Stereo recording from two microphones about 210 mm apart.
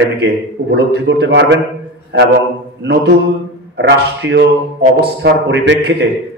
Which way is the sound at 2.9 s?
50° right (ahead or behind).